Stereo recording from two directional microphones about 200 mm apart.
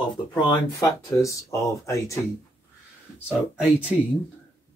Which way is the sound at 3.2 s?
5° right (ahead or behind).